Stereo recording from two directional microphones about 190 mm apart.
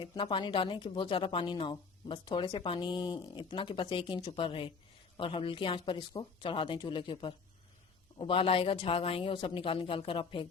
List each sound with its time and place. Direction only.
0.0 s a woman's voice: 25° left (ahead or behind)